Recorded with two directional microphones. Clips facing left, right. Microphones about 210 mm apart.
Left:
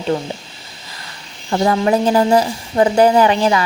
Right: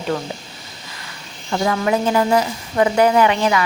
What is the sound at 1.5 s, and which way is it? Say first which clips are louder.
A woman's voice: left 4 dB; 35° left (ahead or behind).